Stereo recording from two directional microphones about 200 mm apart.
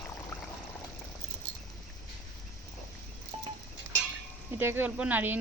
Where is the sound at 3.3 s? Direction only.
30° right (ahead or behind).